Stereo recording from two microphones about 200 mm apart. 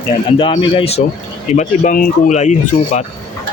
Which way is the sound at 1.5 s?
40° left (ahead or behind).